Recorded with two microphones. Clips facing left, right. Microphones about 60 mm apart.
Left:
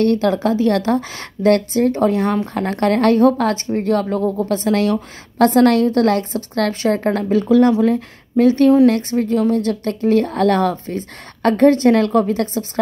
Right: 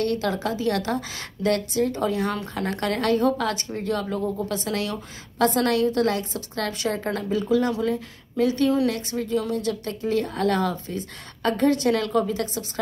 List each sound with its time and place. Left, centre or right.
0.0 s a woman's voice: left
6.7 s a woman's voice: left